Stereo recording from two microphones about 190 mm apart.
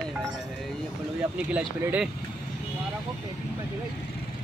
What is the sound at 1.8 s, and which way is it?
Speech, 10° right (ahead or behind).